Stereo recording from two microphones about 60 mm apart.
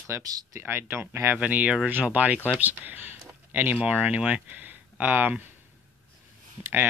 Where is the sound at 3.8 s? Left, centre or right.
Right.